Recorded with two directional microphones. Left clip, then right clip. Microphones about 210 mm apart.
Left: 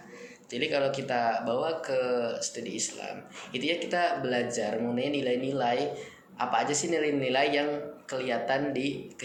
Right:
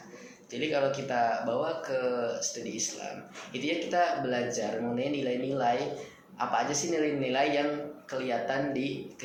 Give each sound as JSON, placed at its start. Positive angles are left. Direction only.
{"t": 0.5, "sound": "speech", "side_deg": 45}
{"t": 3.5, "sound": "speech", "side_deg": 45}